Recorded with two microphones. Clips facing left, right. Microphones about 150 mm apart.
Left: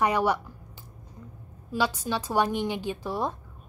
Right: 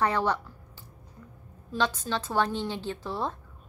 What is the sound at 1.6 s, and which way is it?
A woman's voice, 10° left (ahead or behind).